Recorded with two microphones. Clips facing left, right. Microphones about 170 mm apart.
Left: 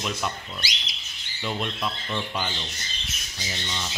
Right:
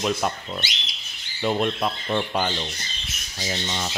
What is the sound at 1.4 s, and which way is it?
Speech, 45° right (ahead or behind).